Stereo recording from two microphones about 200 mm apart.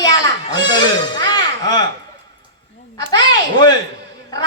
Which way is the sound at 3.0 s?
20° left (ahead or behind).